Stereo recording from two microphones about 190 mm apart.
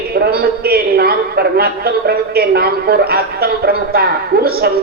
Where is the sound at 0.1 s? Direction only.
55° right (ahead or behind).